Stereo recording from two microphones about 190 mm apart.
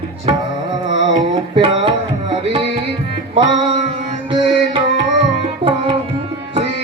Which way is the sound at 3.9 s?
25° right (ahead or behind).